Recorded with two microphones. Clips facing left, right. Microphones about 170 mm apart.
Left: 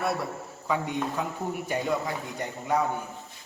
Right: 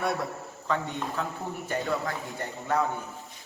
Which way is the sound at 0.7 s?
10° left (ahead or behind).